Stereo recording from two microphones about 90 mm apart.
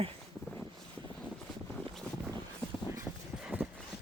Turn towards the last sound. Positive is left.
turn(degrees=-20)  # may be behind; listen again after turning